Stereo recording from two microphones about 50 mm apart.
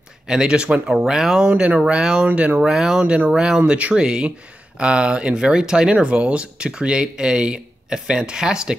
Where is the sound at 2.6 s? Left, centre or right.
Centre.